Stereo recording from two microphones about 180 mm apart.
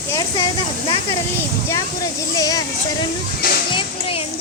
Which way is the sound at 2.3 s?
20° left (ahead or behind).